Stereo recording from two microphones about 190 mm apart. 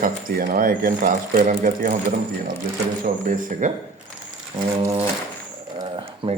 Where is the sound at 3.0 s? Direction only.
45° right (ahead or behind).